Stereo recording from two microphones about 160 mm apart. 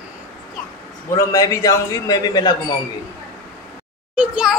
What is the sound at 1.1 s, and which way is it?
A man's voice, 20° left (ahead or behind).